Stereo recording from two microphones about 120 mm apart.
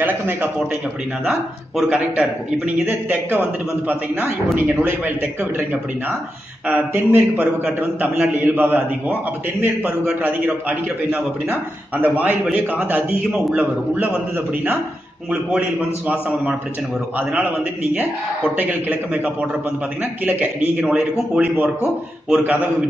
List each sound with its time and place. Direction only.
1.8 s a man's voice: 10° right (ahead or behind)
4.8 s a man's voice: 15° right (ahead or behind)
6.7 s a man's voice: 15° right (ahead or behind)
16.1 s a man's voice: 10° right (ahead or behind)
17.9 s a man's voice: 15° right (ahead or behind)